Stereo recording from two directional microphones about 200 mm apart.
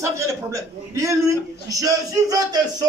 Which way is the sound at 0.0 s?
15° right (ahead or behind).